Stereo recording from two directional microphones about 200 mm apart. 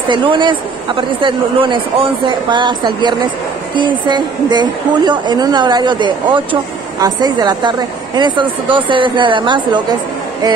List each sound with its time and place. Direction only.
0.1 s a woman's voice: 25° right (ahead or behind)